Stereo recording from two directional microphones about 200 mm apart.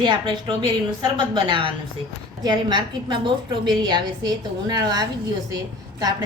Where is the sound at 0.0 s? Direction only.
25° right (ahead or behind).